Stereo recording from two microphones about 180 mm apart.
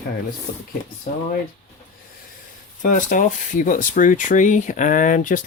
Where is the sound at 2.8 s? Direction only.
45° left (ahead or behind).